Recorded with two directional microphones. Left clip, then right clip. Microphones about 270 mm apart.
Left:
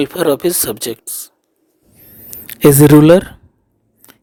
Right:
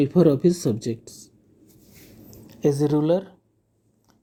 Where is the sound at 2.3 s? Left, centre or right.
Left.